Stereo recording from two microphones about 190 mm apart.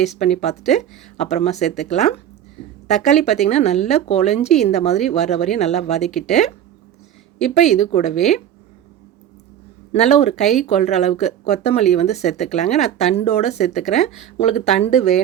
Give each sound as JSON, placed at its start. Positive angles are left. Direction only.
{"t": 0.0, "sound": "speech", "side_deg": 35}
{"t": 6.0, "sound": "speech", "side_deg": 0}
{"t": 7.6, "sound": "speech", "side_deg": 35}
{"t": 8.1, "sound": "speech", "side_deg": 0}
{"t": 9.9, "sound": "speech", "side_deg": 35}
{"t": 10.4, "sound": "speech", "side_deg": 0}
{"t": 10.7, "sound": "speech", "side_deg": 35}